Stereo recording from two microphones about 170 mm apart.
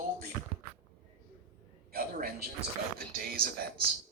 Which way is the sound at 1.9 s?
60° right (ahead or behind).